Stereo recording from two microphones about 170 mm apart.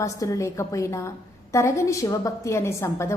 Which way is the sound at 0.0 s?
20° left (ahead or behind).